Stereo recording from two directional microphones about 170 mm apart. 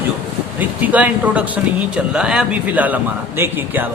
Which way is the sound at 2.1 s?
5° right (ahead or behind).